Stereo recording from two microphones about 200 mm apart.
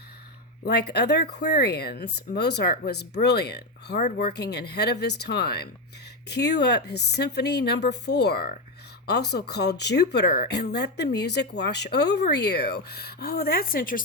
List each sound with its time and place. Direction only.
0.6 s speech: 55° left (ahead or behind)